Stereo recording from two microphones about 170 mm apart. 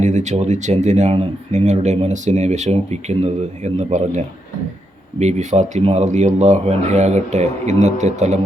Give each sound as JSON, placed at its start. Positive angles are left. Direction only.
{"t": 0.0, "sound": "speech", "side_deg": -45}
{"t": 5.2, "sound": "speech", "side_deg": -45}